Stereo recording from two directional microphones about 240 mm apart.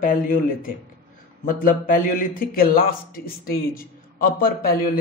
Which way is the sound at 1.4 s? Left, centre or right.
Left.